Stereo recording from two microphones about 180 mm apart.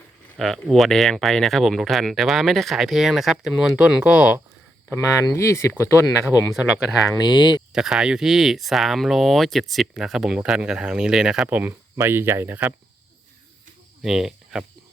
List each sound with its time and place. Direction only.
0.3 s speech: centre (ahead or behind)
4.9 s speech: 15° left (ahead or behind)
6.2 s speech: 5° right (ahead or behind)
7.3 s speech: 25° left (ahead or behind)
7.7 s speech: 5° right (ahead or behind)
14.0 s speech: 5° right (ahead or behind)